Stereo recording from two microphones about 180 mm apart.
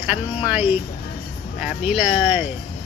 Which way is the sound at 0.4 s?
10° right (ahead or behind).